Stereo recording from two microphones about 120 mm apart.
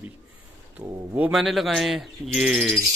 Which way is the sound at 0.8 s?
15° right (ahead or behind).